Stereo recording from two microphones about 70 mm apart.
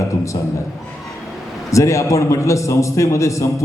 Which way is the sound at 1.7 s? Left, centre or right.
Left.